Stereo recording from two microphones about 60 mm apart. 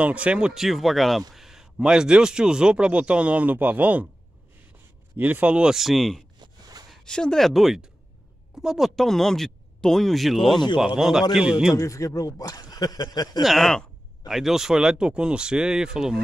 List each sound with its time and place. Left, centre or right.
0.0 s speech: right
0.6 s a man's voice: centre; by 4.1 s right
5.1 s speech: right
5.8 s speech: centre
7.1 s speech: centre
7.4 s a man's voice: centre
11.7 s speech: left
13.4 s a man's voice: centre